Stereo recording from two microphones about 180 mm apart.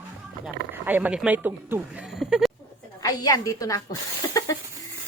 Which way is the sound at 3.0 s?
20° left (ahead or behind).